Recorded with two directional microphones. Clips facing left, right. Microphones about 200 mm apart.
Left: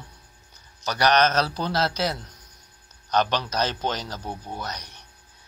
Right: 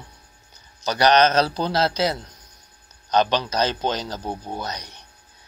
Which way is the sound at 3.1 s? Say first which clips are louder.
Right 3 dB; 25° right (ahead or behind).